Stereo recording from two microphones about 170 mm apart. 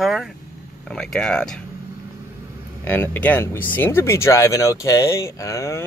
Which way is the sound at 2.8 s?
10° left (ahead or behind).